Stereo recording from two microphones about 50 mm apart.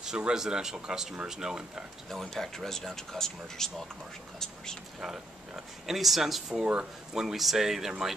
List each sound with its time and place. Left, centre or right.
0.0 s speech: centre
2.0 s speech: centre
5.9 s speech: centre
6.6 s speech: right
7.2 s speech: centre